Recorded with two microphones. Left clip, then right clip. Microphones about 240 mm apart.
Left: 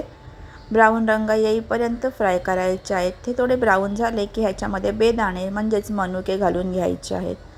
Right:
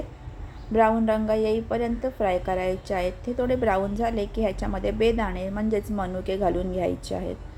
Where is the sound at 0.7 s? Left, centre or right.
Centre.